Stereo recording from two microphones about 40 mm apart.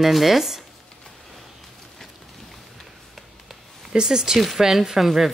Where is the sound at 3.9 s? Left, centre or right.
Centre.